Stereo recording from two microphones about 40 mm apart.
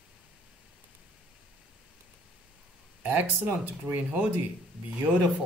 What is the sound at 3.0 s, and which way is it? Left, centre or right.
Speech, right.